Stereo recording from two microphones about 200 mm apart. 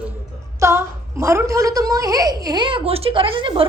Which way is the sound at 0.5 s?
15° right (ahead or behind).